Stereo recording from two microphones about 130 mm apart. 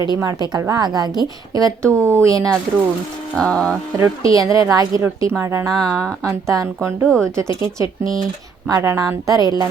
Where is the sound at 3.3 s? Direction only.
5° left (ahead or behind).